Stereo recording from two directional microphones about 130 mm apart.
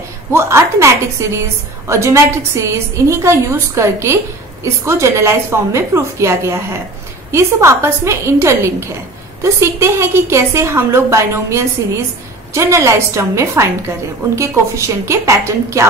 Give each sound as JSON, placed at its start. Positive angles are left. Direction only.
{"t": 0.3, "sound": "a woman's voice", "side_deg": -20}